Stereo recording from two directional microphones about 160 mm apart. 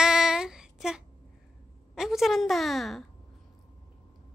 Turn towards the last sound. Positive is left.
turn(degrees=0)  # may be behind; listen again after turning